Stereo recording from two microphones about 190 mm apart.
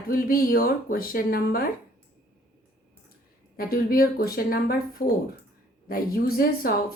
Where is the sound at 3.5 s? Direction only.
50° left (ahead or behind).